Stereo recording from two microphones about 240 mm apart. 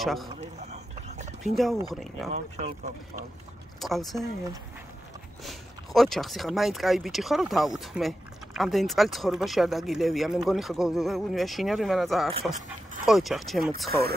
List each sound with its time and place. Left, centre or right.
0.0 s speech: centre
0.4 s a sound: right
1.4 s speech: centre
2.3 s speech: right
3.8 s speech: centre
5.4 s speech: centre
13.8 s speech: right